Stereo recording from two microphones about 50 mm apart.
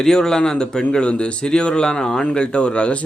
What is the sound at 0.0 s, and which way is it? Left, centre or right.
A man's voice, centre.